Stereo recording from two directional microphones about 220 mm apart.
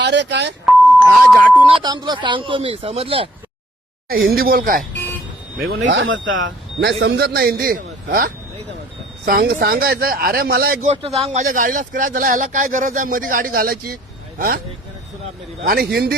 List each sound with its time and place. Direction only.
0.0 s speech: 50° right (ahead or behind)
0.6 s beep: centre (ahead or behind)
1.6 s speech: 20° right (ahead or behind)
4.4 s speech: 40° right (ahead or behind)
5.5 s speech: 60° right (ahead or behind); by 10.9 s 40° right (ahead or behind)
10.9 s speech: 25° right (ahead or behind); by 14.6 s 40° right (ahead or behind)
15.6 s speech: 45° right (ahead or behind)